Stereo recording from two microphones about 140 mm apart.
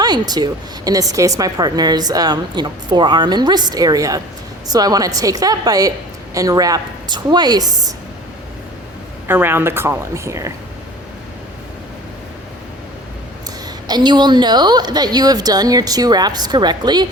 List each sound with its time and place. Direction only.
0.0 s a woman's voice: 30° right (ahead or behind)
9.2 s speech: 15° right (ahead or behind)
13.8 s a woman's voice: 30° right (ahead or behind)